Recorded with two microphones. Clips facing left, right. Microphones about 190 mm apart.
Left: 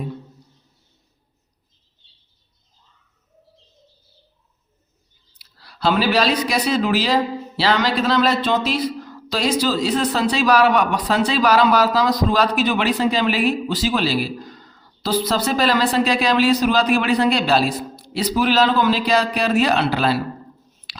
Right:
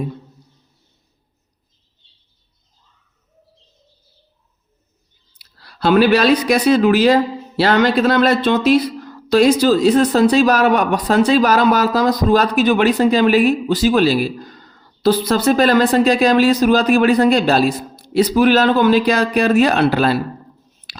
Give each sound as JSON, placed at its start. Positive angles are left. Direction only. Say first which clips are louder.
{"t": 5.6, "sound": "speech", "louder": "right 6 dB", "side_deg": -55}